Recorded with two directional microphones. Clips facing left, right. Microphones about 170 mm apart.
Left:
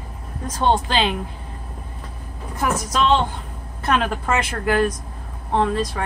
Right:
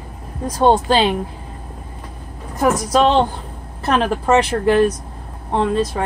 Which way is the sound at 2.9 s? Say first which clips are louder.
Right 3 dB; 35° right (ahead or behind).